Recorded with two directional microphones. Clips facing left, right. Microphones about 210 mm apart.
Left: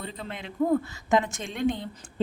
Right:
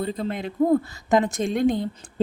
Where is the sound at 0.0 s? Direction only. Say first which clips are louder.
Right 10 dB; 40° right (ahead or behind).